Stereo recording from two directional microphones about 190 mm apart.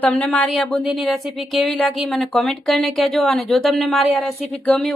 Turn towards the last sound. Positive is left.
turn(degrees=5)  # may be behind; listen again after turning